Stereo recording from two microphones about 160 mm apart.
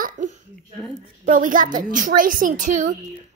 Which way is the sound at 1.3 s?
55° right (ahead or behind).